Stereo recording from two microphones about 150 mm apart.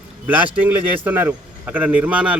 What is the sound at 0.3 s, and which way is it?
A man's voice, 10° right (ahead or behind).